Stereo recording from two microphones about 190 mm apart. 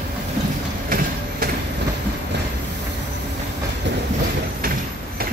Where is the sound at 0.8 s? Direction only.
50° right (ahead or behind).